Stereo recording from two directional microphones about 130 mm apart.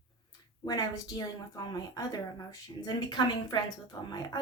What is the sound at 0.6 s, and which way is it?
A woman's voice, 30° left (ahead or behind).